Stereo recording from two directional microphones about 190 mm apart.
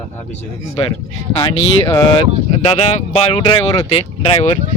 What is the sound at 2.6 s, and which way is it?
Speech, 35° left (ahead or behind).